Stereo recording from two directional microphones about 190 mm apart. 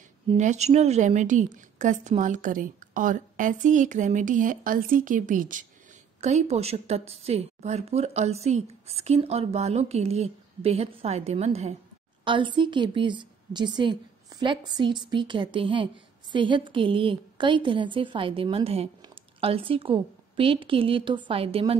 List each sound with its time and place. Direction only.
0.3 s a woman's voice: 35° right (ahead or behind)